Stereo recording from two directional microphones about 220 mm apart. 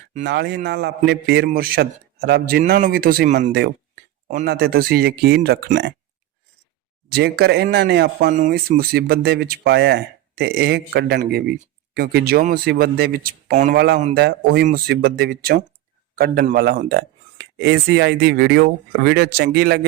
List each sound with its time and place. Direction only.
0.3 s speech: 50° right (ahead or behind)
7.1 s speech: 45° right (ahead or behind)
13.7 s speech: 45° right (ahead or behind)